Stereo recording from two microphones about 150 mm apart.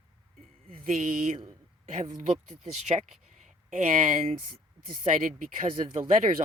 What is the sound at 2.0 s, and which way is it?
Speech, 45° right (ahead or behind).